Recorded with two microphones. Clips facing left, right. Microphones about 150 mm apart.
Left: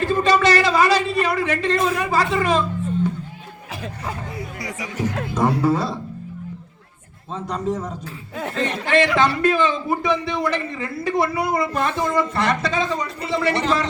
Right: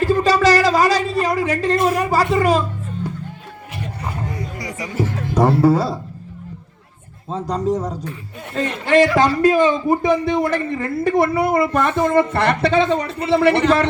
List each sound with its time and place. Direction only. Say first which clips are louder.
0.0 s a sound: right 3 dB; 40° right (ahead or behind)
4.4 s music: right 2 dB; centre (ahead or behind)
5.4 s speech: right 5 dB; 35° right (ahead or behind)
7.3 s a man's voice: right 4 dB; 35° right (ahead or behind); by 13.8 s 60° right (ahead or behind)